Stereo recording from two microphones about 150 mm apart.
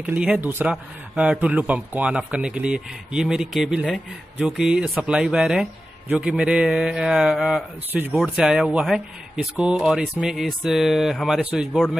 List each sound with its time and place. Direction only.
0.0 s a man's voice: 10° right (ahead or behind)